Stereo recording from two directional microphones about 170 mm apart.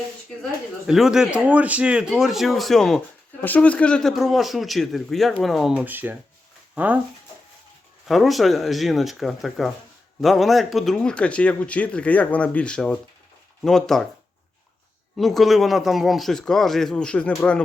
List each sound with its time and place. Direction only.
0.9 s speech: centre (ahead or behind)
8.0 s speech: centre (ahead or behind)
15.2 s speech: centre (ahead or behind)